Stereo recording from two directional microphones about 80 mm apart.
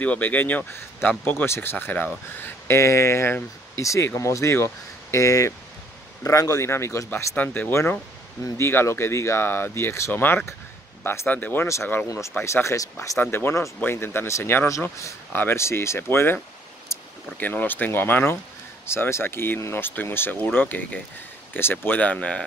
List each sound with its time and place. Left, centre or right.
0.0 s speech: centre
7.3 s speech: left
10.1 s speech: left
11.6 s speech: left
13.2 s speech: left
17.4 s speech: left